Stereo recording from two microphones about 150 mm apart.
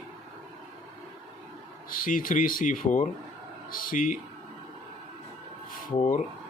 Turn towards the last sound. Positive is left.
turn(degrees=60)  # may be behind; listen again after turning